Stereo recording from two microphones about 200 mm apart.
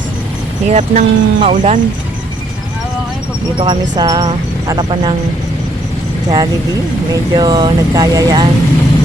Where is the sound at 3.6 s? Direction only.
20° right (ahead or behind).